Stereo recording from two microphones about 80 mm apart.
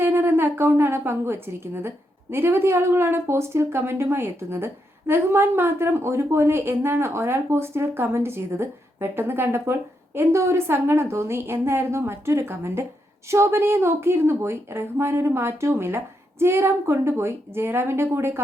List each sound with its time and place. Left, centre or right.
0.0 s a woman's voice: right